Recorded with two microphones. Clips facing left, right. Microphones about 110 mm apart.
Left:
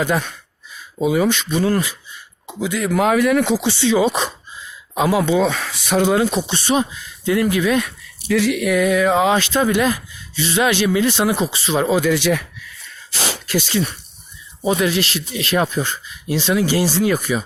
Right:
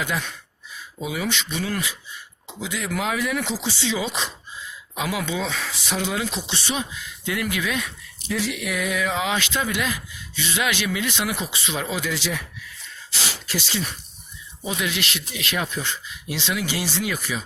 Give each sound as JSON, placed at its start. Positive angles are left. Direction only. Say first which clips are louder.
{"t": 0.0, "sound": "speech", "louder": "left 8 dB", "side_deg": 45}
{"t": 2.5, "sound": "speech", "louder": "left 8 dB", "side_deg": 50}
{"t": 4.9, "sound": "speech", "louder": "left 10 dB", "side_deg": 40}
{"t": 5.5, "sound": "speech", "louder": "left 7 dB", "side_deg": 60}
{"t": 7.8, "sound": "speech", "louder": "left 8 dB", "side_deg": 65}
{"t": 13.1, "sound": "a sound", "louder": "left 7 dB", "side_deg": 45}
{"t": 14.7, "sound": "speech", "louder": "left 9 dB", "side_deg": 40}